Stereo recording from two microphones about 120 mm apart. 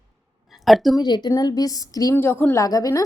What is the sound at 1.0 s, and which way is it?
A woman's voice, 35° left (ahead or behind).